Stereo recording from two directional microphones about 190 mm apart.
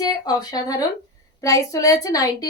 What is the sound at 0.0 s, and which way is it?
A woman's voice, 20° left (ahead or behind).